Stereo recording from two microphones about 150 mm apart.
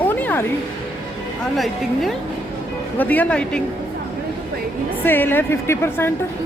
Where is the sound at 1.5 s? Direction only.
Centre (ahead or behind).